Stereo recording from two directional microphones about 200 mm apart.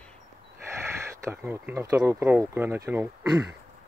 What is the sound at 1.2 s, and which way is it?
Speech, 10° right (ahead or behind).